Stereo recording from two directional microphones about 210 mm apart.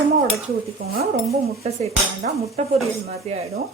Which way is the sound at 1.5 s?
30° right (ahead or behind).